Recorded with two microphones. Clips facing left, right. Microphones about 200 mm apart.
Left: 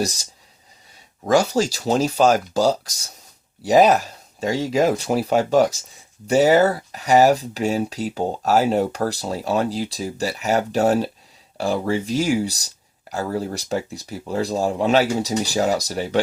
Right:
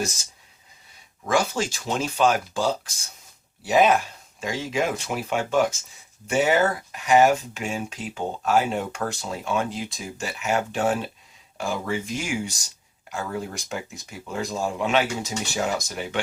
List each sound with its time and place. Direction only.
0.0 s speech: 35° left (ahead or behind)